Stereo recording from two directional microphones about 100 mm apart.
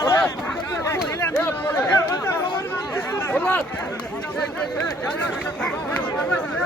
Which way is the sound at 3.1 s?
20° left (ahead or behind).